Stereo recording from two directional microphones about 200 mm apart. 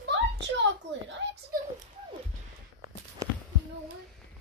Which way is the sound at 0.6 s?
65° right (ahead or behind).